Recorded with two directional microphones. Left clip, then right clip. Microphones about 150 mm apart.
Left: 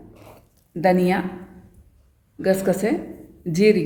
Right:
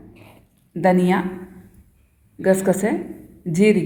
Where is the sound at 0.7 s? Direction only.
Centre (ahead or behind).